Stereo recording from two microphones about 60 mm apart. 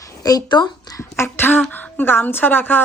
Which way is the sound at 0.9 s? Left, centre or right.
Left.